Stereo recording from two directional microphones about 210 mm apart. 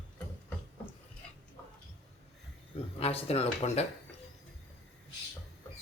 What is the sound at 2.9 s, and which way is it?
Speech, 30° left (ahead or behind).